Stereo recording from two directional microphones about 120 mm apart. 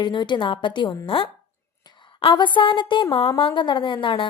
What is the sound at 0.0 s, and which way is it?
A woman's voice, 40° left (ahead or behind).